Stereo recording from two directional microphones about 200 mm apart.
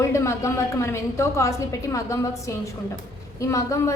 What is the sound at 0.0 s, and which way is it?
A woman's voice, 15° left (ahead or behind).